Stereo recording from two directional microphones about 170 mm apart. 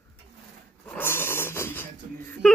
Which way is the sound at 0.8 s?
10° left (ahead or behind).